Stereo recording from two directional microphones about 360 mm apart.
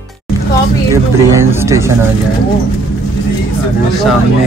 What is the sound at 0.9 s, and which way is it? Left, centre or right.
Music, centre.